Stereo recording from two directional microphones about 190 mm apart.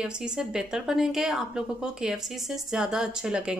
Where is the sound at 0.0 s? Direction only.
5° right (ahead or behind).